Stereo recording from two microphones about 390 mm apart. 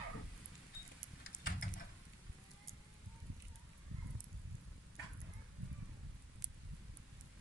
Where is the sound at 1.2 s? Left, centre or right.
Left.